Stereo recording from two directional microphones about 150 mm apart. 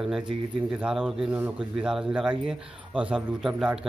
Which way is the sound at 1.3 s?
15° right (ahead or behind).